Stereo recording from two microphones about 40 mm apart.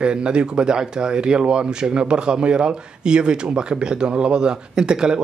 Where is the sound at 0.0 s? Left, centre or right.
Right.